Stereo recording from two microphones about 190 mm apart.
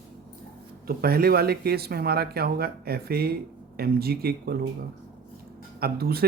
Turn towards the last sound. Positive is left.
turn(degrees=-55)  # may be behind; listen again after turning